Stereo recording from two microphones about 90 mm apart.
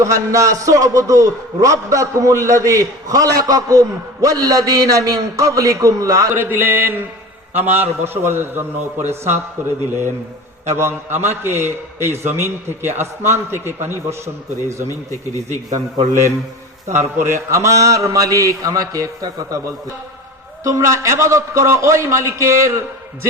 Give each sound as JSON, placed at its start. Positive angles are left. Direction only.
{"t": 0.0, "sound": "a man's voice", "side_deg": -40}
{"t": 6.3, "sound": "a man's voice", "side_deg": -25}
{"t": 10.8, "sound": "a man's voice", "side_deg": -25}
{"t": 16.9, "sound": "a man's voice", "side_deg": -30}